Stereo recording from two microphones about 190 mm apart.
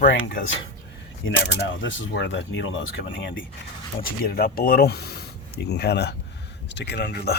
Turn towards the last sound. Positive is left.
turn(degrees=60)  # may be behind; listen again after turning